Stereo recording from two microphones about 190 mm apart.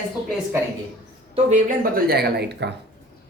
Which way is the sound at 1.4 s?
45° right (ahead or behind).